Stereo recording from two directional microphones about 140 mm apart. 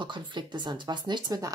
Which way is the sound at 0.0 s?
35° right (ahead or behind).